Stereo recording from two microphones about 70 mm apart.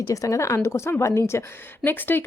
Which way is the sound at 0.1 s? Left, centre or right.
Left.